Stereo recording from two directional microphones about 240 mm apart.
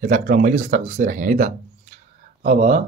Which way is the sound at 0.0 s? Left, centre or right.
Right.